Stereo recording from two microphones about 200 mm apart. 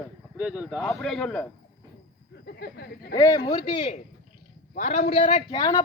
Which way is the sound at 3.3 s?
25° left (ahead or behind).